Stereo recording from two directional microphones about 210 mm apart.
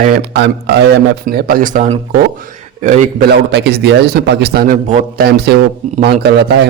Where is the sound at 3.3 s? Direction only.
50° right (ahead or behind).